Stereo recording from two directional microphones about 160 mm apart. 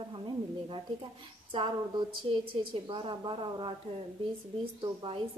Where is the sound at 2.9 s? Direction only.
30° right (ahead or behind).